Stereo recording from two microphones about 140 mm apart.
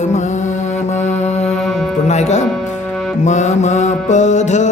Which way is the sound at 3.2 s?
55° left (ahead or behind).